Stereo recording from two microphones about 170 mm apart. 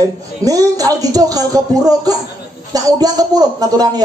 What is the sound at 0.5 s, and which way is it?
Speech, 20° right (ahead or behind).